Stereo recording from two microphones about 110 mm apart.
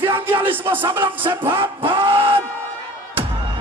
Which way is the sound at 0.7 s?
35° right (ahead or behind).